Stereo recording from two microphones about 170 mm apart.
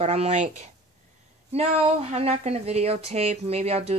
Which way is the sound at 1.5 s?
40° right (ahead or behind).